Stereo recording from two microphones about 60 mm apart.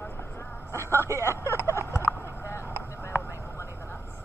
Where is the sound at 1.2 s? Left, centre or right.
Left.